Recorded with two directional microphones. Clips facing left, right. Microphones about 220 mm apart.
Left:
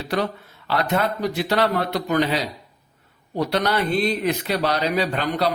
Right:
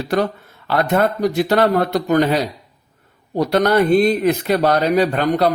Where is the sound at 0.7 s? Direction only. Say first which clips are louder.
Right 5 dB; 50° right (ahead or behind).